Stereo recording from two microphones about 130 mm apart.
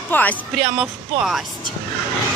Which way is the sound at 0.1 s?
10° left (ahead or behind).